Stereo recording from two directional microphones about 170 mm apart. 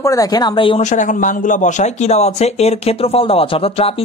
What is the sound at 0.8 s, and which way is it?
A man's voice, 45° left (ahead or behind).